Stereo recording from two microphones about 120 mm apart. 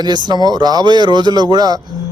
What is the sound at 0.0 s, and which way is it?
A man's voice, 35° right (ahead or behind).